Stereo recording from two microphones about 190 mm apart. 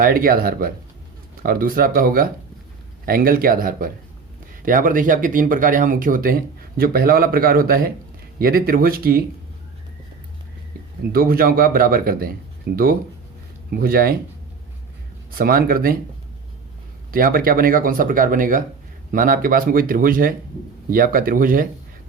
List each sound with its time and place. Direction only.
0.0 s speech: 50° right (ahead or behind)
11.1 s speech: 50° right (ahead or behind)
15.3 s speech: 50° right (ahead or behind)
17.1 s speech: 50° right (ahead or behind)